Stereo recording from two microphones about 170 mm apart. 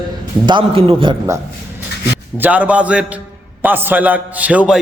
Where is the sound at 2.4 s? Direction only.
10° right (ahead or behind).